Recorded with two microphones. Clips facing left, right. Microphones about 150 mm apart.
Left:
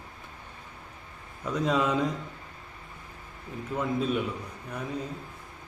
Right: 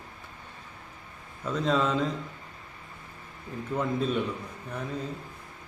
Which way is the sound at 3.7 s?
10° left (ahead or behind).